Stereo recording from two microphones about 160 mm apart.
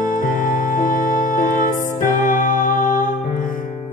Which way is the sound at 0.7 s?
55° left (ahead or behind).